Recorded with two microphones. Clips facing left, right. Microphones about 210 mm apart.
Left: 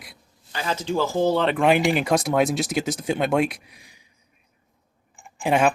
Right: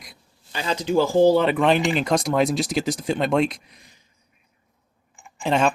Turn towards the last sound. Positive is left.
turn(degrees=10)  # may be behind; listen again after turning